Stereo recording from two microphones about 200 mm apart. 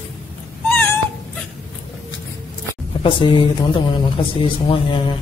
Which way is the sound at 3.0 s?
25° left (ahead or behind).